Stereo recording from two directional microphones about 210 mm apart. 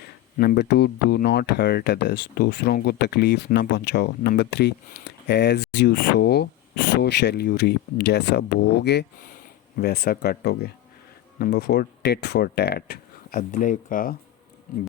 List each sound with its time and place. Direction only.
0.3 s speech: 50° left (ahead or behind)